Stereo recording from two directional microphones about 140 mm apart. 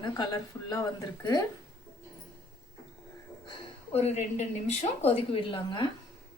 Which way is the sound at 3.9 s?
50° left (ahead or behind).